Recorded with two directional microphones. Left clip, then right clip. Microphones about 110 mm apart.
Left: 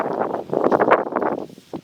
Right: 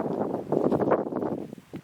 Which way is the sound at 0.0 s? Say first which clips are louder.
Left 7 dB; 40° left (ahead or behind).